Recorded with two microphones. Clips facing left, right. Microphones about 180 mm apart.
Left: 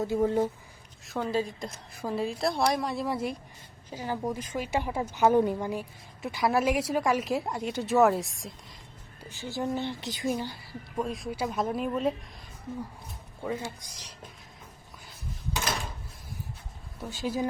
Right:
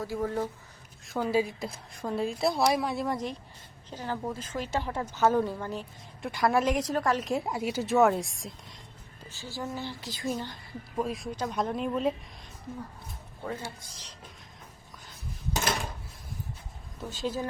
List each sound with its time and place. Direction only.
0.0 s a woman's voice: 20° left (ahead or behind)
1.0 s a woman's voice: centre (ahead or behind); by 5.8 s 15° left (ahead or behind)
6.2 s a woman's voice: 5° left (ahead or behind)
9.3 s a woman's voice: 20° left (ahead or behind)
10.9 s a woman's voice: centre (ahead or behind)
13.5 s a woman's voice: 15° left (ahead or behind)
17.1 s a woman's voice: 10° left (ahead or behind)